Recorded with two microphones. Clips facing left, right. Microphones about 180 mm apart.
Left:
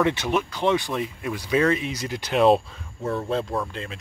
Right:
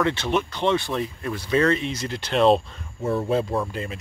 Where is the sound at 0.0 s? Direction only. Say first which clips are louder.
Left 1 dB; 15° left (ahead or behind).